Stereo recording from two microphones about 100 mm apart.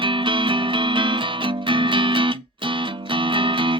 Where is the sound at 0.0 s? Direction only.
55° right (ahead or behind).